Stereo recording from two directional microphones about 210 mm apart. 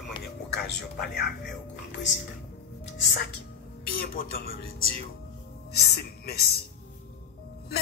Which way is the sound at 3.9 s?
45° left (ahead or behind).